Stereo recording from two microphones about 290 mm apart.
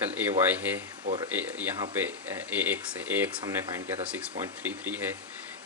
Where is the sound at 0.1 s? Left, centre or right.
Centre.